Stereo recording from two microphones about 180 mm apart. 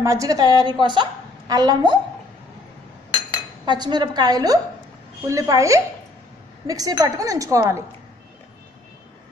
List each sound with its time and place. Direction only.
0.0 s speech: 20° right (ahead or behind)
3.6 s a woman's voice: 25° right (ahead or behind)